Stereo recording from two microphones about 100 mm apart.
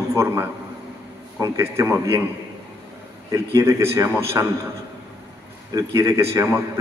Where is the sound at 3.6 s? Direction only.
30° right (ahead or behind).